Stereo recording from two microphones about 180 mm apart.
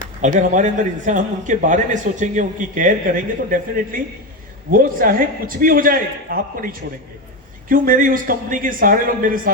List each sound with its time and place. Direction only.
0.2 s speech: 45° right (ahead or behind)